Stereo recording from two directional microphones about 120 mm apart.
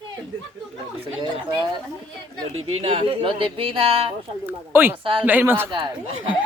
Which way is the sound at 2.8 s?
50° right (ahead or behind).